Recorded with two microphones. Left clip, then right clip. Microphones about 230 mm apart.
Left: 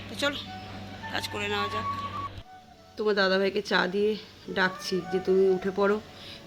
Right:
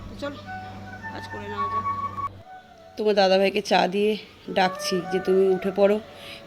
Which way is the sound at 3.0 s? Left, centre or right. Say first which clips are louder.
Right 5 dB; left.